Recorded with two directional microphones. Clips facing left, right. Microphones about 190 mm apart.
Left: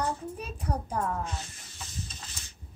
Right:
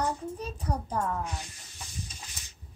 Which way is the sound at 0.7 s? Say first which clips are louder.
Even; 10° right (ahead or behind).